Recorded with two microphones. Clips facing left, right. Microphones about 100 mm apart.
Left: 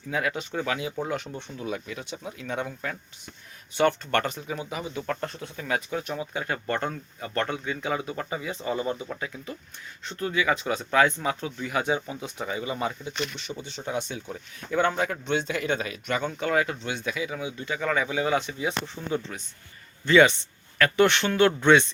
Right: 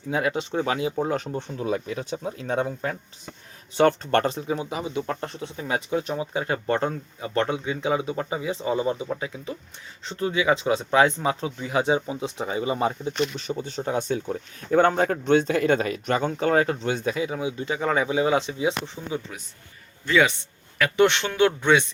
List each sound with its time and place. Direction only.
0.1 s speech: 30° right (ahead or behind)
18.9 s speech: 5° right (ahead or behind)